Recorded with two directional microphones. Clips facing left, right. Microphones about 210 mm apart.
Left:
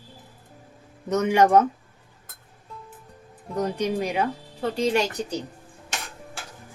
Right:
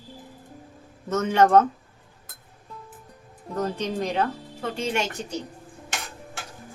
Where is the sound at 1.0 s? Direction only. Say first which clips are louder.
Left 1 dB; 15° left (ahead or behind).